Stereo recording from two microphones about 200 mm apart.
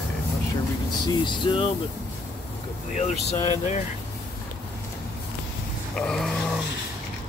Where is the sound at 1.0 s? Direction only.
20° left (ahead or behind).